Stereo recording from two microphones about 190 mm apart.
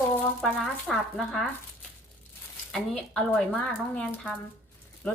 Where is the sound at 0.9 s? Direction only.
Centre (ahead or behind).